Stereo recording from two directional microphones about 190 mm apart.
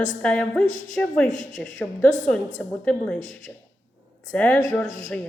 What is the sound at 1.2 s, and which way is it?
Speech, 40° left (ahead or behind).